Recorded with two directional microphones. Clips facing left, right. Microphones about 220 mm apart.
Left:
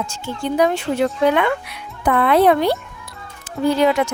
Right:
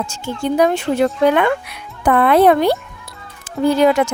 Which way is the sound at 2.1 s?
50° right (ahead or behind).